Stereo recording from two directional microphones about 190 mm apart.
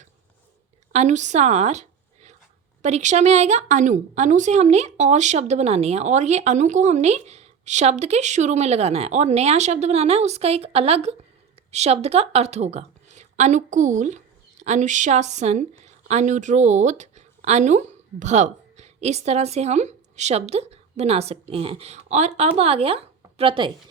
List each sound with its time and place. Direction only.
0.9 s a woman's voice: 40° right (ahead or behind)